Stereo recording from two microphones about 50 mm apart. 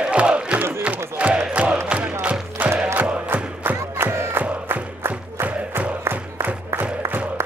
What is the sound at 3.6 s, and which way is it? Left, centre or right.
Music, right.